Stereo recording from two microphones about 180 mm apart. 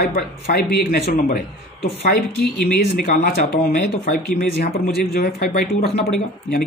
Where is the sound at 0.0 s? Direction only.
55° left (ahead or behind).